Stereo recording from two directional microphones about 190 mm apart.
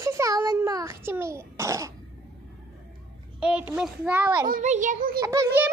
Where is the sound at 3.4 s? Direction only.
5° right (ahead or behind).